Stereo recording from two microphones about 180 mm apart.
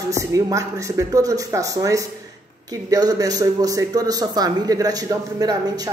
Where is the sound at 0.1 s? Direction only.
15° right (ahead or behind).